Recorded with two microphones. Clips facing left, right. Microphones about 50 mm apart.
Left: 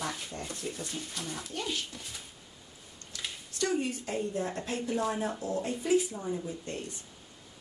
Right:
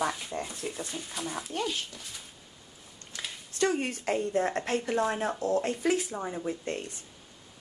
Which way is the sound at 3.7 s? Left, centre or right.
Right.